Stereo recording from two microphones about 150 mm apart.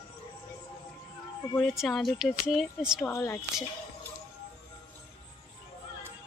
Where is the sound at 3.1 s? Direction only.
15° left (ahead or behind).